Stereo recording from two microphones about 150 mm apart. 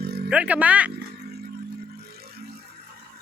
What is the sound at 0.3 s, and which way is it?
Speech, 10° right (ahead or behind).